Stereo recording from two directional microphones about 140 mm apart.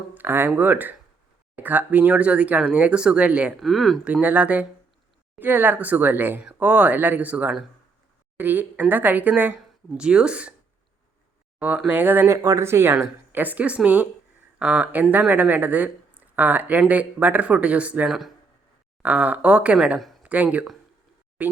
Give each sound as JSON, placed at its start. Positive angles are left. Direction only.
{"t": 0.1, "sound": "speech", "side_deg": -15}
{"t": 3.6, "sound": "speech", "side_deg": 0}
{"t": 4.1, "sound": "speech", "side_deg": -10}
{"t": 11.9, "sound": "speech", "side_deg": -15}
{"t": 20.3, "sound": "speech", "side_deg": -10}